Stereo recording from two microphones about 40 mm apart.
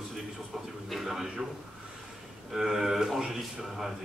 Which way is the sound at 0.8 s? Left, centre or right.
Centre.